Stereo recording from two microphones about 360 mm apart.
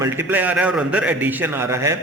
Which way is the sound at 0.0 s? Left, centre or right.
Centre.